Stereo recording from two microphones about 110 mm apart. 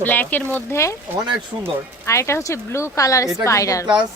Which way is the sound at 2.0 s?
25° left (ahead or behind).